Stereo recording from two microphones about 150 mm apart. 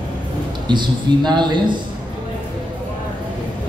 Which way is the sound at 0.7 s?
30° right (ahead or behind).